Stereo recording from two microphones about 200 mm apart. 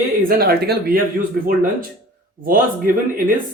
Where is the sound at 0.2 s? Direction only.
50° right (ahead or behind).